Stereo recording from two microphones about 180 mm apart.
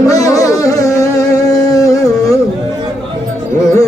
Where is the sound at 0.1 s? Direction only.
20° left (ahead or behind).